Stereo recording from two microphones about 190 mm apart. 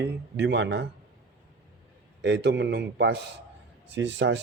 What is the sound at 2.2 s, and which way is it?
Speech, 65° right (ahead or behind).